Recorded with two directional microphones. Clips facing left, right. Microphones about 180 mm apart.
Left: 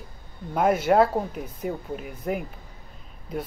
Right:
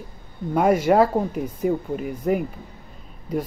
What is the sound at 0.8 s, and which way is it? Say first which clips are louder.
Speech: right 2 dB; 5° right (ahead or behind).